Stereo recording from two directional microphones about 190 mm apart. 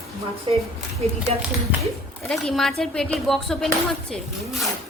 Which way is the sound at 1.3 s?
35° right (ahead or behind).